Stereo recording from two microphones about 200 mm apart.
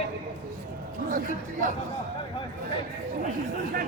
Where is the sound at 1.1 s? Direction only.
40° right (ahead or behind).